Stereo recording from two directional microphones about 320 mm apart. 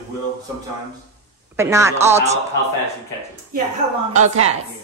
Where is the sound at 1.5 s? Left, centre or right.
Centre.